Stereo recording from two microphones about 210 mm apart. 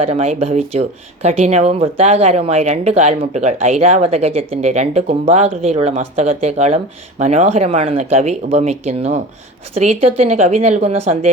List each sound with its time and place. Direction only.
0.0 s speech: 30° right (ahead or behind)